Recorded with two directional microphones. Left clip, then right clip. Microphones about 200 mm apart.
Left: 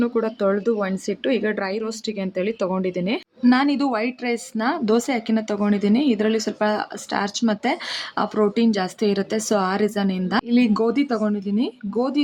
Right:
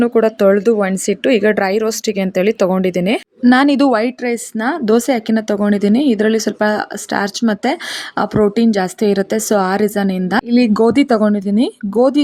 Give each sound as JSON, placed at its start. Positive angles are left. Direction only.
{"t": 0.0, "sound": "a woman's voice", "side_deg": -25}
{"t": 3.6, "sound": "a woman's voice", "side_deg": -35}